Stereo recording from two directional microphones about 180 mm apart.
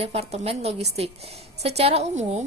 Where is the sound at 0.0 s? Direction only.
35° right (ahead or behind).